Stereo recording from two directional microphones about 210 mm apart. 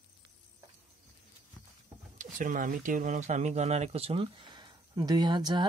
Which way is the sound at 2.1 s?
40° right (ahead or behind).